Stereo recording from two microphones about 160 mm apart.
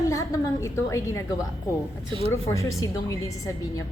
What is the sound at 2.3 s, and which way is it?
A woman's voice, 20° left (ahead or behind).